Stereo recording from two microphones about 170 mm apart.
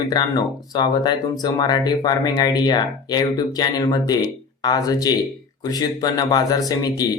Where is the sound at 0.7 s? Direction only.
25° left (ahead or behind).